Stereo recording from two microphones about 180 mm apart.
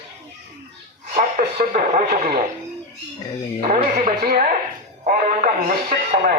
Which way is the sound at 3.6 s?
45° right (ahead or behind).